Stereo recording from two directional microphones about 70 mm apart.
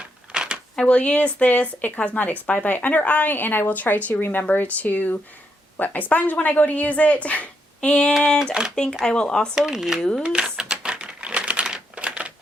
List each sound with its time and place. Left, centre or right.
0.0 s a sound: centre
0.8 s speech: centre
9.6 s speech: centre
10.0 s speech: centre
10.4 s typing: centre